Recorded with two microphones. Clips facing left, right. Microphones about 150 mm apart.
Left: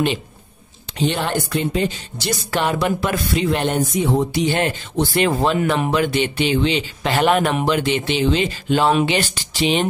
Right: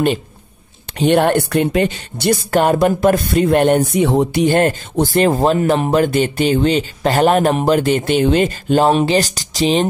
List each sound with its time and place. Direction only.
0.9 s speech: 60° right (ahead or behind); by 9.8 s 35° right (ahead or behind)